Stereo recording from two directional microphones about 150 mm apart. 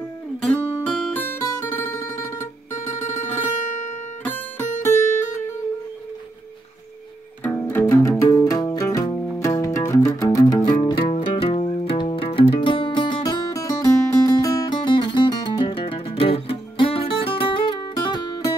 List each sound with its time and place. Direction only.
0.6 s guitar: 15° right (ahead or behind)
1.1 s guitar: 15° left (ahead or behind)
3.1 s music: 10° left (ahead or behind)
3.6 s guitar: 55° left (ahead or behind)
4.8 s music: 15° left (ahead or behind)
7.4 s music: 15° left (ahead or behind)